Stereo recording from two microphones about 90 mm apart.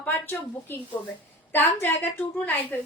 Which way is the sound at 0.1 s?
25° left (ahead or behind).